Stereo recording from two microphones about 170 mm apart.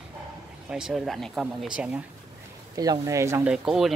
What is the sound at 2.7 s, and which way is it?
Speech, 20° right (ahead or behind).